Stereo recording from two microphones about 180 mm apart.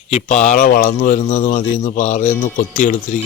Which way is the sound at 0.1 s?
40° left (ahead or behind).